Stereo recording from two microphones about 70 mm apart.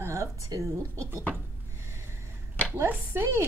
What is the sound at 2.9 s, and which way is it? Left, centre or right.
Speech, right.